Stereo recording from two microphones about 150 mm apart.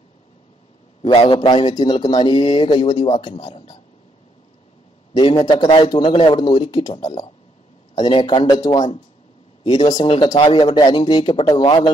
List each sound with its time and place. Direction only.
1.0 s speech: 35° left (ahead or behind)
5.1 s speech: 30° left (ahead or behind)